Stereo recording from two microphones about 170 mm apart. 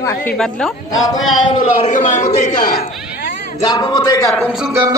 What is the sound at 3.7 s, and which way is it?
Speech, 25° left (ahead or behind).